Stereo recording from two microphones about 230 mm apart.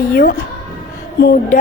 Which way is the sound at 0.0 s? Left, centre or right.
Left.